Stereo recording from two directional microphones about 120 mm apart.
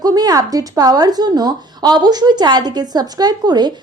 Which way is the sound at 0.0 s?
35° right (ahead or behind).